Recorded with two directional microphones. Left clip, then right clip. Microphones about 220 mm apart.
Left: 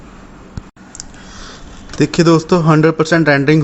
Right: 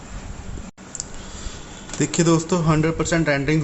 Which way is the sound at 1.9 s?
30° left (ahead or behind).